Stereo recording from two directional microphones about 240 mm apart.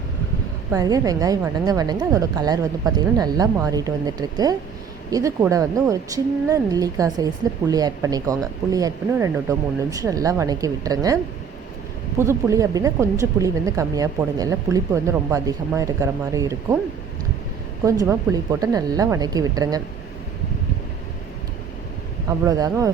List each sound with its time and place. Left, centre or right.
0.7 s speech: centre
12.2 s speech: centre
17.8 s speech: centre
22.3 s speech: centre